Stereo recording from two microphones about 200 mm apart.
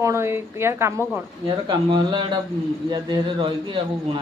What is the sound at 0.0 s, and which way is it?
A woman's voice, 15° right (ahead or behind).